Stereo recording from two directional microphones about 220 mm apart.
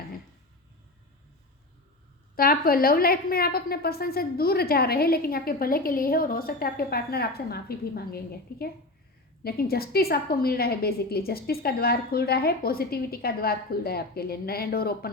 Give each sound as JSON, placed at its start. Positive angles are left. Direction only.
{"t": 2.3, "sound": "a woman's voice", "side_deg": 40}